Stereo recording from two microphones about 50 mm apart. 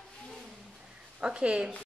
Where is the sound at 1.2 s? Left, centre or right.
Centre.